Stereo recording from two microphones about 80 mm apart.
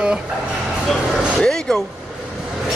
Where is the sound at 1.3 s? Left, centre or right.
Centre.